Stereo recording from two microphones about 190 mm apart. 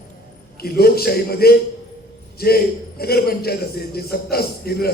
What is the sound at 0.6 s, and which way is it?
A man's voice, 55° left (ahead or behind).